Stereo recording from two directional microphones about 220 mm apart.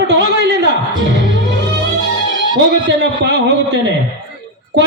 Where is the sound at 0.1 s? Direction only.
50° right (ahead or behind).